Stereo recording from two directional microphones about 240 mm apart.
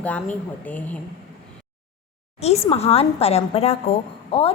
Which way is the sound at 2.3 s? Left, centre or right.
Left.